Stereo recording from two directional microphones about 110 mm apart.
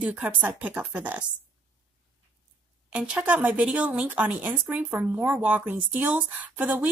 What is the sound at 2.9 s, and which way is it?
Speech, 10° right (ahead or behind).